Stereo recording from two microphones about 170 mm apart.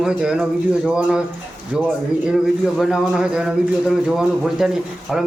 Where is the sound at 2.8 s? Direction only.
5° right (ahead or behind).